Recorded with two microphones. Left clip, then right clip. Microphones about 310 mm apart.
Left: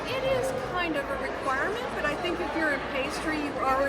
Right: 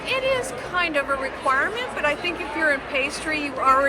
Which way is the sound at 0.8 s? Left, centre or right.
Centre.